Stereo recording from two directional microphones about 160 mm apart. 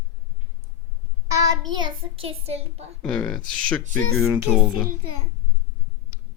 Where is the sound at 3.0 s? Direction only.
5° left (ahead or behind).